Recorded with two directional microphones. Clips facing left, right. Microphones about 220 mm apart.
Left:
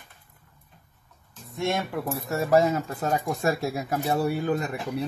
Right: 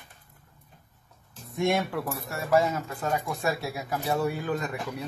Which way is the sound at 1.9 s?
25° left (ahead or behind).